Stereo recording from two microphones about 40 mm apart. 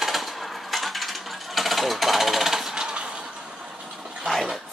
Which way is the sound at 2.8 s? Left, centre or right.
Right.